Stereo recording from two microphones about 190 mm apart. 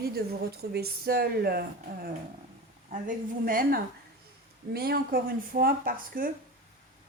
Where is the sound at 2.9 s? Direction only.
45° right (ahead or behind).